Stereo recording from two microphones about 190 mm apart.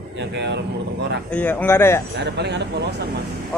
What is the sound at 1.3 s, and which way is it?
Speech, 10° left (ahead or behind).